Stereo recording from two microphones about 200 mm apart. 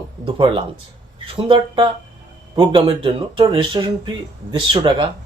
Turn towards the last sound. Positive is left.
turn(degrees=-25)  # may be behind; listen again after turning